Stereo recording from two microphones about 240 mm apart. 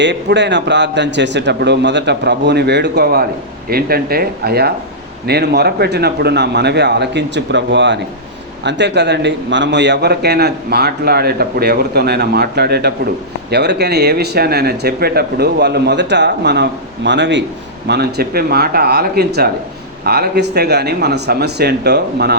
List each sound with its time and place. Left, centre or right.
0.0 s a man's voice: right